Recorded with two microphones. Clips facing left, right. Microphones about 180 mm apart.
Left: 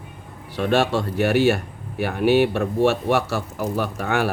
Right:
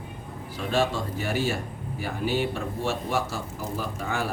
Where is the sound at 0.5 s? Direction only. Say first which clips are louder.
Left 6 dB; 70° left (ahead or behind).